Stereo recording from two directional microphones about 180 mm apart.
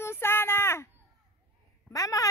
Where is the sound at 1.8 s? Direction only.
20° left (ahead or behind).